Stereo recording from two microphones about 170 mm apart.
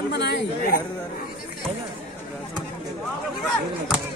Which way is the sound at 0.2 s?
80° left.